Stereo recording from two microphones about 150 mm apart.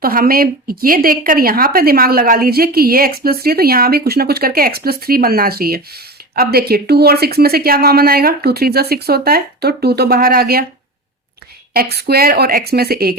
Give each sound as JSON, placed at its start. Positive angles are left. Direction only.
{"t": 0.0, "sound": "a woman's voice", "side_deg": -75}
{"t": 11.7, "sound": "a woman's voice", "side_deg": -90}